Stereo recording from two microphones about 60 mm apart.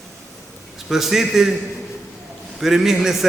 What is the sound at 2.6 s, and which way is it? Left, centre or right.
Speech, centre.